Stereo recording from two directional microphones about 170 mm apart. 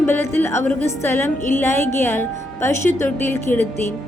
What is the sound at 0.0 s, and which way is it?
Music, 15° left (ahead or behind).